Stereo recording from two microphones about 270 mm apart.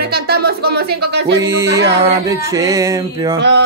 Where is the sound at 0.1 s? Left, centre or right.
Right.